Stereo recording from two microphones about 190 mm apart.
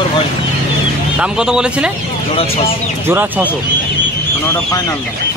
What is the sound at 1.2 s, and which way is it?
Speech, 5° right (ahead or behind).